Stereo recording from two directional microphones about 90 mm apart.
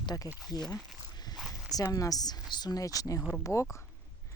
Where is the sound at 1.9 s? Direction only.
40° left (ahead or behind).